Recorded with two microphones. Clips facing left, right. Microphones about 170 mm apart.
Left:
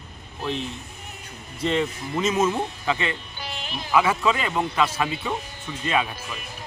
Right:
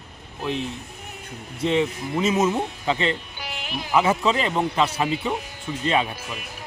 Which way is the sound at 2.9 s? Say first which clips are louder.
Right 3 dB; 30° right (ahead or behind).